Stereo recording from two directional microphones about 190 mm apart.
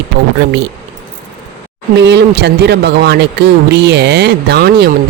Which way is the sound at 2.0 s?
65° right (ahead or behind).